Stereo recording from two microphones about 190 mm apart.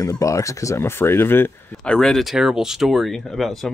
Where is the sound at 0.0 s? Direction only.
15° left (ahead or behind).